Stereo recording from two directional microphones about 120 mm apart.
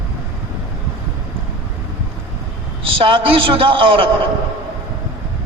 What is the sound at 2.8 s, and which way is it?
A man's voice, 50° right (ahead or behind).